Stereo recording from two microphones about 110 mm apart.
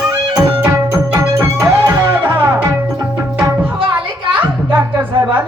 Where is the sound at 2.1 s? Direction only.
20° right (ahead or behind).